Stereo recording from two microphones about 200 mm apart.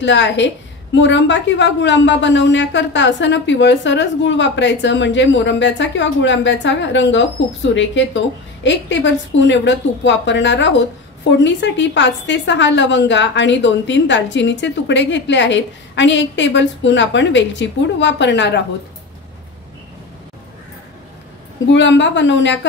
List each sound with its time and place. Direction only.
0.0 s a woman's voice: 65° left (ahead or behind)
21.7 s a woman's voice: 65° left (ahead or behind)